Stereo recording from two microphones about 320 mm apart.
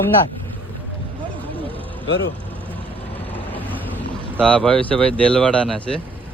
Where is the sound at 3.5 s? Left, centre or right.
Centre.